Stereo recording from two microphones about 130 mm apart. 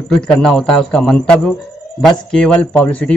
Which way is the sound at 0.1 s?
5° left (ahead or behind).